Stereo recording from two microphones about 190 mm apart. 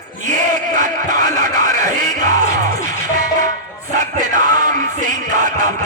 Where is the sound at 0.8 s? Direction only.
40° right (ahead or behind).